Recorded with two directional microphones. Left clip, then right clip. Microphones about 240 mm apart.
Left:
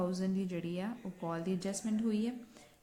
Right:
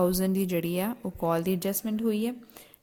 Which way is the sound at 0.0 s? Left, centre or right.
Right.